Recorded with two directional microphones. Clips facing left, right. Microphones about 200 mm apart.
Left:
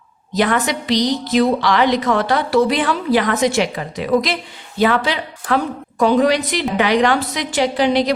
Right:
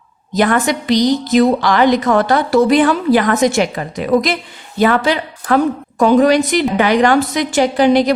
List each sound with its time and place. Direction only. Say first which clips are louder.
0.3 s a woman's voice: right 3 dB; 50° right (ahead or behind)